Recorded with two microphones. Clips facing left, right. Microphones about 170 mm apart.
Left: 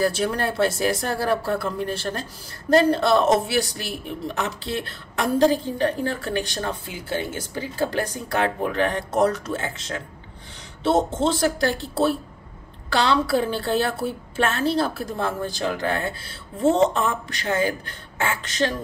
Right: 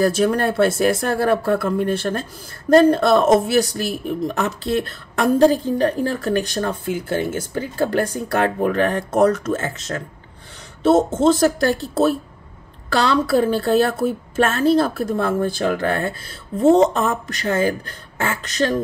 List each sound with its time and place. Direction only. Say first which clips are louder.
0.0 s speech: right 5 dB; 45° right (ahead or behind)
2.7 s speech: right 5 dB; 50° right (ahead or behind)
11.1 s speech: right 6 dB; 45° right (ahead or behind)